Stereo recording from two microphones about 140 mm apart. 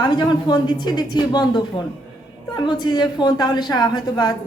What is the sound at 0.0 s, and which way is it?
A woman's voice, 35° left (ahead or behind).